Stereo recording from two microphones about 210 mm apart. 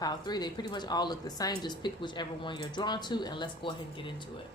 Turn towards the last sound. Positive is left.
turn(degrees=25)  # may be behind; listen again after turning